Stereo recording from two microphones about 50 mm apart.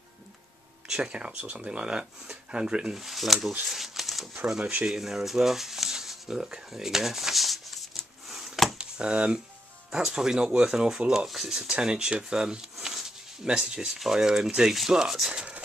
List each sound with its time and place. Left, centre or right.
0.8 s speech: centre
3.0 s speech: centre
3.6 s a sound: centre
4.6 s speech: right
4.8 s a sound: centre
8.7 s a sound: centre
9.8 s speech: centre
11.2 s speech: centre
11.7 s speech: centre